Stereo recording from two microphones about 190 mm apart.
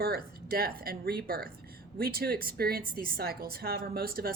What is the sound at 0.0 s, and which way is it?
A woman's voice, 55° right (ahead or behind).